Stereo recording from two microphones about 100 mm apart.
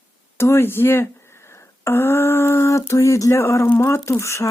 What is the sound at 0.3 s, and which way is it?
Speech, 25° left (ahead or behind).